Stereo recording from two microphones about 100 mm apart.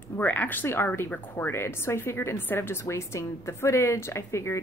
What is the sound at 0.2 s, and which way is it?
Speech, 20° left (ahead or behind).